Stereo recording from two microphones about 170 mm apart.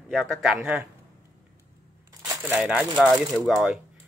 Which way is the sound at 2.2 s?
Centre (ahead or behind).